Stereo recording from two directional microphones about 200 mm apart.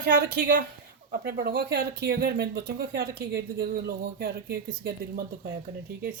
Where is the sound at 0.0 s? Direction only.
50° right (ahead or behind).